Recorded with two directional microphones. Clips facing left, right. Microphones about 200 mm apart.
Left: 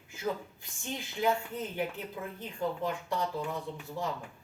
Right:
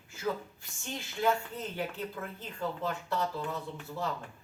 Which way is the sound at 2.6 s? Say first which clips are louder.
Left 2 dB; 15° left (ahead or behind).